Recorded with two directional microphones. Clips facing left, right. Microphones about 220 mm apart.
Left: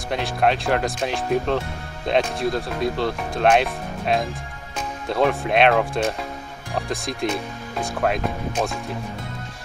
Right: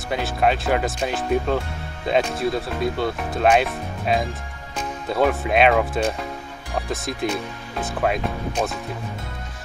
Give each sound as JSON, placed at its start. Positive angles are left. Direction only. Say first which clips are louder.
{"t": 0.1, "sound": "speech", "louder": "even", "side_deg": 0}